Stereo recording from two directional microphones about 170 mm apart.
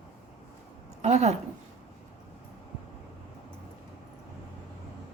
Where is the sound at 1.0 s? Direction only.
40° right (ahead or behind).